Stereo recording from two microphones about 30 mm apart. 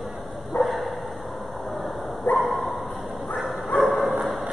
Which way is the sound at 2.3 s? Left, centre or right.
Left.